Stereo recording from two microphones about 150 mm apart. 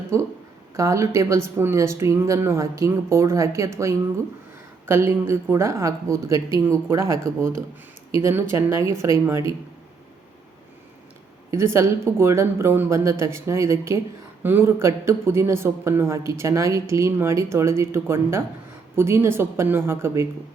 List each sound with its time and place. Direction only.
0.1 s a woman's voice: 20° right (ahead or behind)
4.9 s a woman's voice: 15° right (ahead or behind)
11.5 s speech: 20° right (ahead or behind)